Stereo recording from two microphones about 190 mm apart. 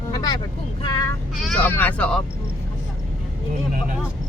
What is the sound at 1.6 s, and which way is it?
Speech, 10° left (ahead or behind).